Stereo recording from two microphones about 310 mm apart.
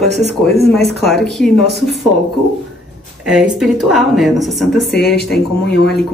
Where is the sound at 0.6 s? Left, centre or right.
Centre.